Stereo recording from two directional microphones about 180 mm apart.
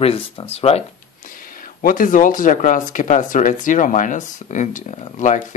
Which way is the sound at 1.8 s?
50° left (ahead or behind).